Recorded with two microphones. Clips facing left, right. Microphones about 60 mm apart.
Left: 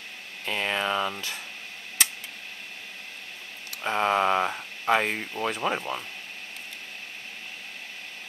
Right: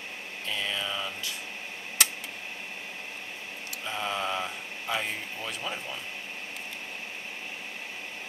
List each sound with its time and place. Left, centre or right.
0.5 s speech: left
3.8 s speech: left